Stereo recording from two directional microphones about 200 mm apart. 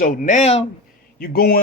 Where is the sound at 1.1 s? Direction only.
45° left (ahead or behind).